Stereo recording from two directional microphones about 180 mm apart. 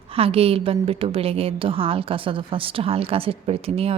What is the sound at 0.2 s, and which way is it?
A woman's voice, 30° right (ahead or behind).